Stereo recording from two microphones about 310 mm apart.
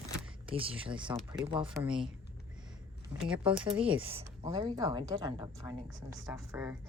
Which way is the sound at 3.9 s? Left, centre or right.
Centre.